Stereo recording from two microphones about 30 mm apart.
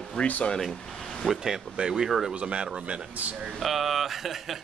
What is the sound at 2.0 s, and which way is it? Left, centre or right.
Speech, centre.